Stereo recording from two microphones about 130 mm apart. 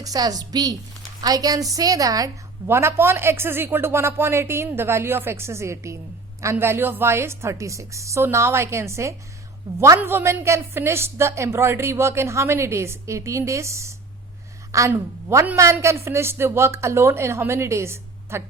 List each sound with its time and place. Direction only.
0.0 s a woman's voice: 30° right (ahead or behind)